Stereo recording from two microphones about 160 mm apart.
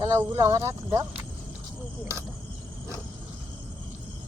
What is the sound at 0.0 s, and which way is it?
Speech, 20° right (ahead or behind).